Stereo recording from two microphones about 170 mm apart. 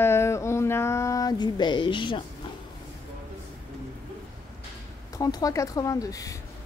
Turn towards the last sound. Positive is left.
turn(degrees=20)  # may be behind; listen again after turning